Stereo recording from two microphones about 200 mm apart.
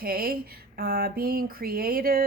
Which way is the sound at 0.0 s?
50° right (ahead or behind).